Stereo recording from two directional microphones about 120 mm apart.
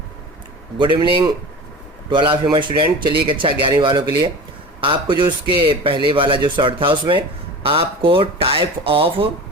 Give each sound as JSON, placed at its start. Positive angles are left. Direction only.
{"t": 0.9, "sound": "speech", "side_deg": -40}